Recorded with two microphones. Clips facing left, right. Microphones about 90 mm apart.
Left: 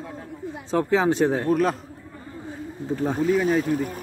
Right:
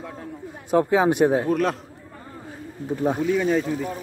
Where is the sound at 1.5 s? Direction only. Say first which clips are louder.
Left 1 dB; centre (ahead or behind).